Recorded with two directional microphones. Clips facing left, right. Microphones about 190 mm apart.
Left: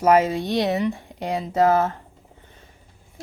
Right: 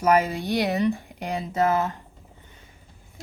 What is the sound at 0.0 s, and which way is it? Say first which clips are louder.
Speech: left 3 dB; 25° left (ahead or behind).